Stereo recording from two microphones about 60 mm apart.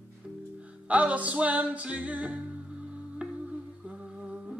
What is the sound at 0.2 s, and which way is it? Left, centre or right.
Music, centre.